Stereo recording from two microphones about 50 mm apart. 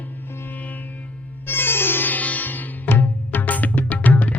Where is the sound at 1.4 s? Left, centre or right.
Left.